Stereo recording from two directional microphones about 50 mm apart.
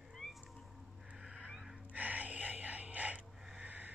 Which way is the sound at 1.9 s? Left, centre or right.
Right.